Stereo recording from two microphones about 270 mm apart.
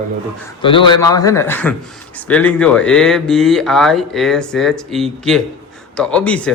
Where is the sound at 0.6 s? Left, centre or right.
Centre.